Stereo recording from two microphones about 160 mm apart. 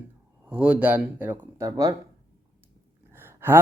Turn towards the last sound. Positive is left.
turn(degrees=-15)  # may be behind; listen again after turning